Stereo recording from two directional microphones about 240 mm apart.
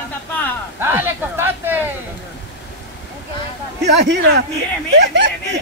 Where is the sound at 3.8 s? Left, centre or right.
Right.